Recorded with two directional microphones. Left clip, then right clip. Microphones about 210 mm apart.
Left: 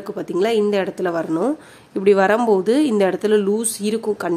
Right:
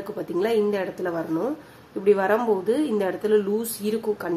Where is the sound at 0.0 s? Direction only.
35° left (ahead or behind).